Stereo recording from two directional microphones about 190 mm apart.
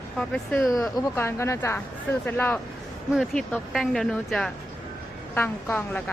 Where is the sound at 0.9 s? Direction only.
15° left (ahead or behind).